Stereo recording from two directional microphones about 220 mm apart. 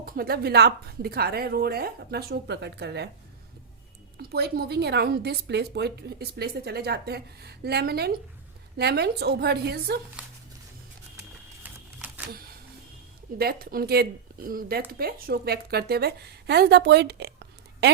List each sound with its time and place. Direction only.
0.0 s speech: 45° right (ahead or behind)
4.2 s speech: 45° right (ahead or behind)
11.6 s a sound: 5° right (ahead or behind)
13.4 s a woman's voice: 45° right (ahead or behind)